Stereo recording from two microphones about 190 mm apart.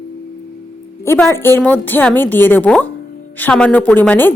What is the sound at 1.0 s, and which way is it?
Speech, 15° left (ahead or behind).